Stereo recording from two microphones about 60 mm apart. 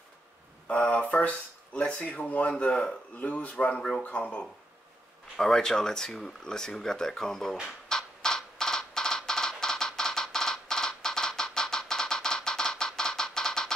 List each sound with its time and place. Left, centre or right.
0.7 s speech: left
7.6 s music: centre